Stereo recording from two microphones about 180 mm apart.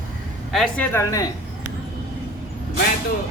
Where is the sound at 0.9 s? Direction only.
20° left (ahead or behind).